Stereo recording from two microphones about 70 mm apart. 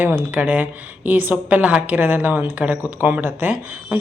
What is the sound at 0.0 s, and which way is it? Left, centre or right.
A woman's voice, right.